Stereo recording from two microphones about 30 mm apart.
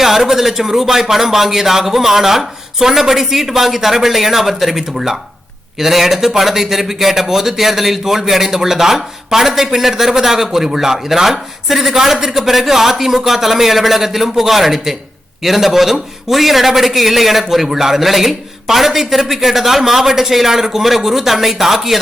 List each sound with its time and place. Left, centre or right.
0.0 s a man's voice: centre